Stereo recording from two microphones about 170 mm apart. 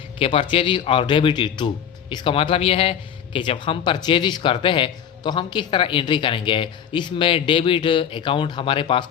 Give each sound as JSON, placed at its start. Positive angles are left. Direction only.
{"t": 0.2, "sound": "speech", "side_deg": 35}